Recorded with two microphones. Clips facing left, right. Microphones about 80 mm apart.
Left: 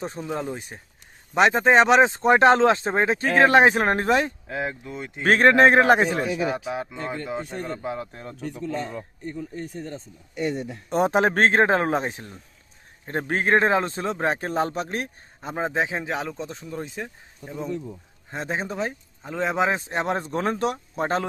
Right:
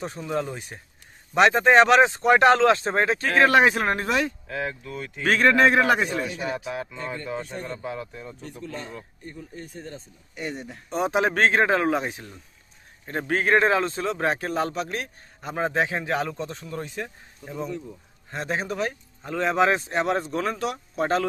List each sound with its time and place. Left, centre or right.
0.0 s speech: left
5.2 s speech: left
7.1 s speech: centre
7.5 s speech: left
7.8 s speech: left
8.3 s speech: left
10.8 s speech: left
15.5 s speech: centre
18.3 s speech: centre
19.9 s speech: left